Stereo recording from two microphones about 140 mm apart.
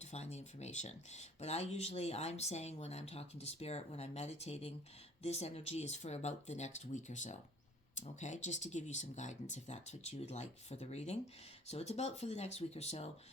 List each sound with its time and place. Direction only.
0.0 s speech: 50° left (ahead or behind)